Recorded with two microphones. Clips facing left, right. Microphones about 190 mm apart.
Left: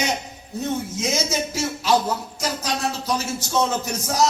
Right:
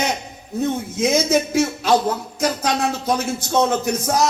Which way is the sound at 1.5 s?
55° right (ahead or behind).